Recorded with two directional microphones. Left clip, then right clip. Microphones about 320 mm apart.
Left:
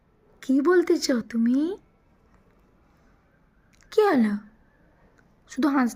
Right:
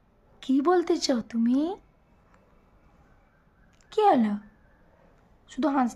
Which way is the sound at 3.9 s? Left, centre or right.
Centre.